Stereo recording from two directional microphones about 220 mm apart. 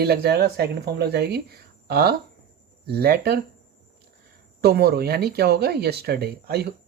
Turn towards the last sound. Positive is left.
turn(degrees=-45)  # may be behind; listen again after turning